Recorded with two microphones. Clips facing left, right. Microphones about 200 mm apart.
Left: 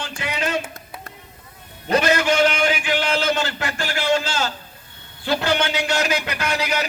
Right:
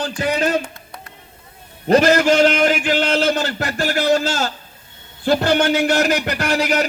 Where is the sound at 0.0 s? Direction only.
40° right (ahead or behind).